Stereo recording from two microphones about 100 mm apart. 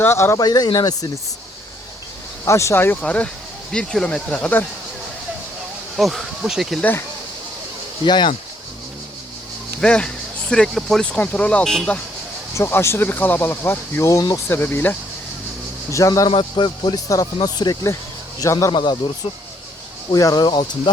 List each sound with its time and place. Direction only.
0.0 s speech: 25° left (ahead or behind)
0.3 s speech: 40° left (ahead or behind)
2.4 s speech: 30° left (ahead or behind)
3.0 s speech: 10° left (ahead or behind)
6.0 s speech: centre (ahead or behind)
8.0 s speech: 50° left (ahead or behind)
9.8 s speech: 10° left (ahead or behind)
12.5 s speech: 25° left (ahead or behind)
14.1 s speech: 35° left (ahead or behind); by 14.9 s 20° left (ahead or behind)
15.9 s speech: 35° left (ahead or behind)
16.3 s a man's voice: 60° left (ahead or behind)
17.4 s speech: 40° left (ahead or behind)
18.7 s speech: 50° left (ahead or behind)
20.1 s speech: 40° left (ahead or behind)